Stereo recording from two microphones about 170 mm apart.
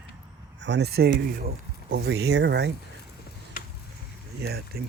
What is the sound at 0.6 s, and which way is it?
Speech, 85° right.